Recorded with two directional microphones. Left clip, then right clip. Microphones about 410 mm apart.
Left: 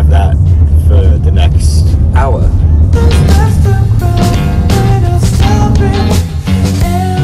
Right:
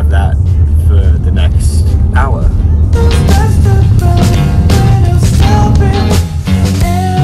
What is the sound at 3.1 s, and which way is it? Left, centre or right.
Music, centre.